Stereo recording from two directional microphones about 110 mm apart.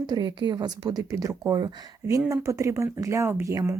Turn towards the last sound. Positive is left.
turn(degrees=-30)  # may be behind; listen again after turning